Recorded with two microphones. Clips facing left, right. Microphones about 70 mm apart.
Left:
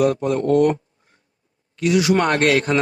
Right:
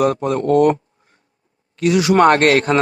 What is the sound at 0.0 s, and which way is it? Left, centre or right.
Speech, right.